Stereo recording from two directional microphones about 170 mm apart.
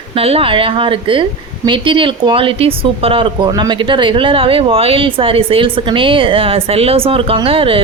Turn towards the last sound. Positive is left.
turn(degrees=-35)  # may be behind; listen again after turning